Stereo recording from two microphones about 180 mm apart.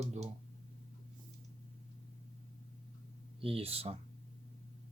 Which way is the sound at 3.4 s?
30° right (ahead or behind).